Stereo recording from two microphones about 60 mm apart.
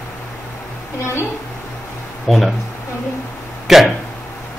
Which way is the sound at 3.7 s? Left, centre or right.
Centre.